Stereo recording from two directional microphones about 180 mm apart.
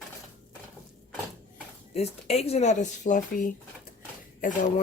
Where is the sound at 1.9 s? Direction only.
35° left (ahead or behind).